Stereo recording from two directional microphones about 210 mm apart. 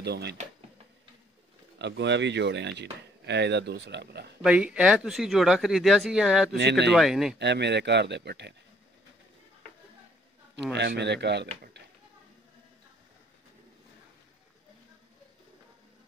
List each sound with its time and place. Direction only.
0.0 s speech: 50° right (ahead or behind)
1.8 s speech: 55° right (ahead or behind)
4.4 s speech: 5° right (ahead or behind)
6.5 s speech: 55° right (ahead or behind)
6.9 s speech: centre (ahead or behind)
7.3 s speech: 55° right (ahead or behind)
10.5 s speech: 55° right (ahead or behind)